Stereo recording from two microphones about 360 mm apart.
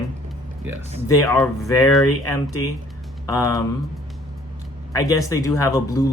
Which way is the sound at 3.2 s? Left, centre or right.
Centre.